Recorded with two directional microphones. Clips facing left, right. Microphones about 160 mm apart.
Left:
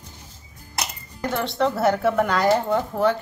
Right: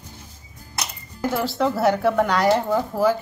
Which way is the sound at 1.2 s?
5° right (ahead or behind).